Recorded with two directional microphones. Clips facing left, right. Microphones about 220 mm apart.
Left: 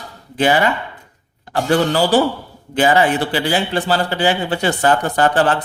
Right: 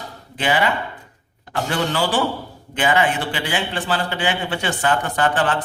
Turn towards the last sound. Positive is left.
turn(degrees=40)  # may be behind; listen again after turning